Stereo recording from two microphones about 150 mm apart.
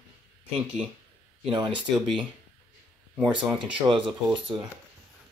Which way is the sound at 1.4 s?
35° right (ahead or behind).